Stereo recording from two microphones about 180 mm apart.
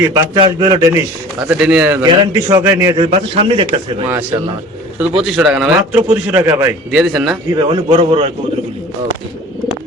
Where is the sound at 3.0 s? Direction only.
35° right (ahead or behind).